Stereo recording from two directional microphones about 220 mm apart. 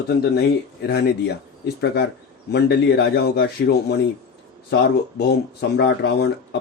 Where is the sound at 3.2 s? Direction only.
45° left (ahead or behind).